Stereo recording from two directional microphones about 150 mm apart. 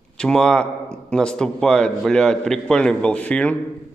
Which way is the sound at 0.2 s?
5° left (ahead or behind).